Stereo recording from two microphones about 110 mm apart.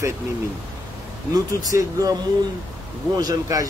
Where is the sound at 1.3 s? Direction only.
35° right (ahead or behind).